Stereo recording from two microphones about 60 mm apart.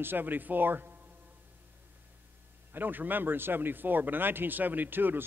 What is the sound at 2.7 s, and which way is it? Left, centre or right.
Speech, right.